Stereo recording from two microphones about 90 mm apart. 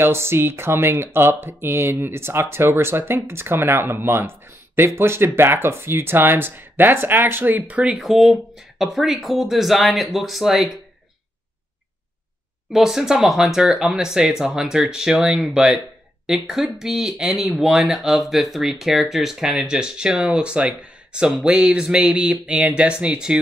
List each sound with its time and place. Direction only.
0.0 s speech: 25° right (ahead or behind); by 10.8 s 5° right (ahead or behind)
12.7 s speech: 5° right (ahead or behind)